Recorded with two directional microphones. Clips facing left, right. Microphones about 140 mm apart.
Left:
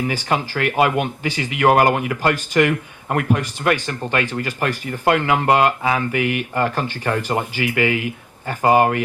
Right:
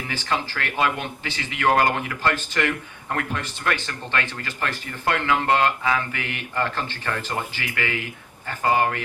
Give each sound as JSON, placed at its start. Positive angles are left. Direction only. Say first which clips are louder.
{"t": 0.1, "sound": "speech", "louder": "left 5 dB", "side_deg": 15}